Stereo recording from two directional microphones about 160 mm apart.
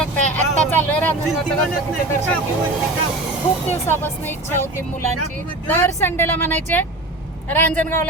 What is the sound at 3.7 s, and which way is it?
Speech, 15° left (ahead or behind).